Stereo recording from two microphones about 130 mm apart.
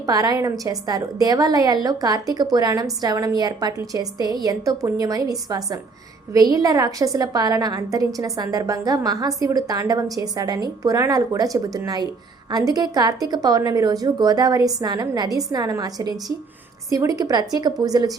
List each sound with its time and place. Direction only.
0.0 s a woman's voice: 30° right (ahead or behind)